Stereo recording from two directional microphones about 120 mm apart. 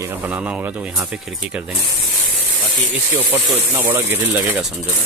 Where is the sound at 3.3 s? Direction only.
15° right (ahead or behind).